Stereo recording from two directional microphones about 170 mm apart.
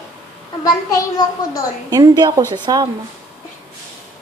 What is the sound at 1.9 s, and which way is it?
Speech, 20° right (ahead or behind).